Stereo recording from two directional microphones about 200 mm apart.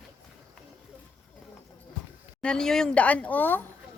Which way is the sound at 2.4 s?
5° left (ahead or behind).